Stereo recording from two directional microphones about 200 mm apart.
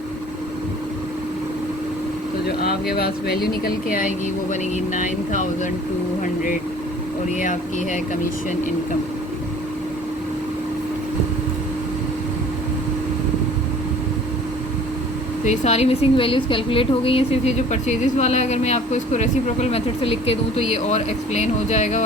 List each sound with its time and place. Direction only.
2.9 s a woman's voice: 50° left (ahead or behind)
15.4 s a woman's voice: 35° left (ahead or behind)